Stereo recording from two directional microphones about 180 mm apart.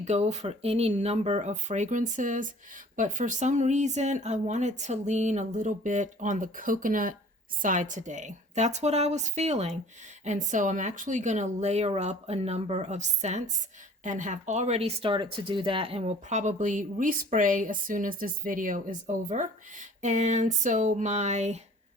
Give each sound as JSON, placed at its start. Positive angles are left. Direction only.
{"t": 0.0, "sound": "speech", "side_deg": -40}